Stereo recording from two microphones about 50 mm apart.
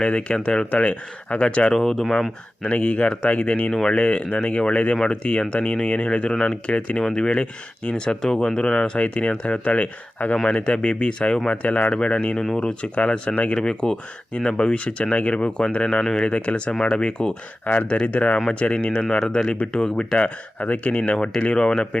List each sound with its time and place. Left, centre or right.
0.0 s speech: centre
1.7 s speech: centre
2.6 s speech: left
6.3 s speech: centre
6.7 s speech: left
7.0 s speech: centre
10.4 s speech: centre
12.4 s speech: centre
12.8 s speech: left
13.6 s speech: centre
20.1 s speech: left